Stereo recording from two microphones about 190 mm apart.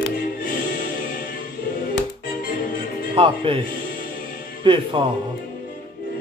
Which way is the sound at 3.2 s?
25° right (ahead or behind).